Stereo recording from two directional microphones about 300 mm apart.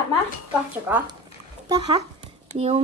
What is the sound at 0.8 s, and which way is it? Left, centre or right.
Speech, centre.